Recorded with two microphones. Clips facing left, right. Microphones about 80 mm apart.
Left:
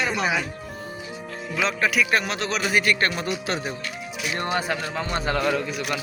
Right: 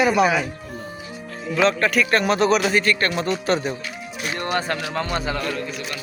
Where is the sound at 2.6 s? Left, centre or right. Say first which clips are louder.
Right 2 dB; centre.